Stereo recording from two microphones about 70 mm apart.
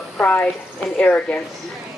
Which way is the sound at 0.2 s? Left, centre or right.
Left.